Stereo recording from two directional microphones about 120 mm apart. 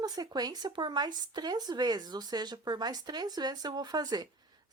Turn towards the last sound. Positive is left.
turn(degrees=-35)  # may be behind; listen again after turning